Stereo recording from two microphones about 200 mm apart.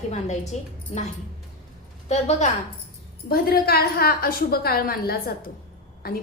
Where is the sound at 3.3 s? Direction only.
50° left (ahead or behind).